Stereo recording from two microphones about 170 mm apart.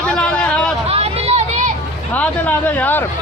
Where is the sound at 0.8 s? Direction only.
35° right (ahead or behind).